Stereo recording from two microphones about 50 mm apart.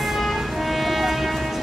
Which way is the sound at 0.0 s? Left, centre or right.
Centre.